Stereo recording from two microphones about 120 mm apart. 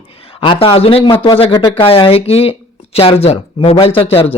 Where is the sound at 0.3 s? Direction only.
45° left (ahead or behind).